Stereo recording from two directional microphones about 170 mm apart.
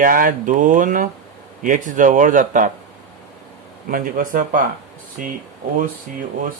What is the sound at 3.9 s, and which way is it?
Speech, 55° right (ahead or behind).